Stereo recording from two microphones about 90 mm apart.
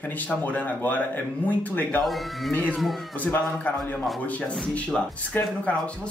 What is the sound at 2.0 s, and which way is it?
Speech, centre (ahead or behind).